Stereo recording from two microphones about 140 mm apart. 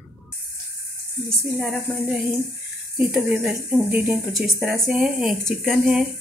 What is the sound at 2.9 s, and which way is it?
Speech, 5° right (ahead or behind).